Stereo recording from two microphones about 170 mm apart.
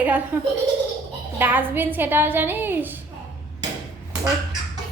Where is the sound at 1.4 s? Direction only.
10° right (ahead or behind).